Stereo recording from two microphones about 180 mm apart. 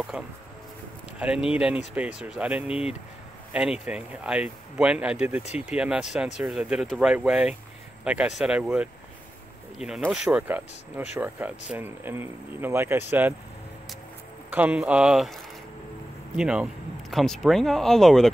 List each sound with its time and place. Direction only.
0.1 s speech: 5° right (ahead or behind)
14.5 s speech: 10° right (ahead or behind)